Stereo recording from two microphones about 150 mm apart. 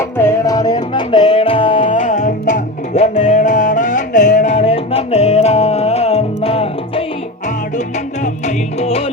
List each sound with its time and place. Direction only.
0.2 s music: 20° left (ahead or behind); by 1.9 s 35° left (ahead or behind)
1.9 s music: 55° left (ahead or behind)
3.2 s music: 60° left (ahead or behind); by 7.0 s 40° left (ahead or behind)
8.2 s music: 50° left (ahead or behind)